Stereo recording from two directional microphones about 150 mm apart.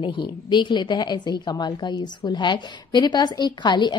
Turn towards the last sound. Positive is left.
turn(degrees=30)  # may be behind; listen again after turning